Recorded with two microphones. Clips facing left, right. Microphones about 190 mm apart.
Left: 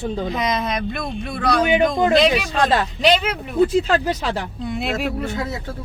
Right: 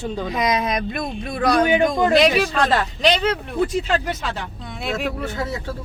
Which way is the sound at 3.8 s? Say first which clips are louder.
Left 3 dB; 35° left (ahead or behind).